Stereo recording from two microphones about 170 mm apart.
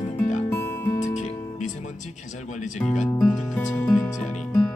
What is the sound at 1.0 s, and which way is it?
Music, 45° left (ahead or behind).